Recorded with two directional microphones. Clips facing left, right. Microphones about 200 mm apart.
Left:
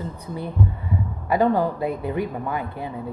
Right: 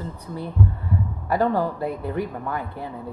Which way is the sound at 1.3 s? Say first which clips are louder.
Left 2 dB; 20° left (ahead or behind).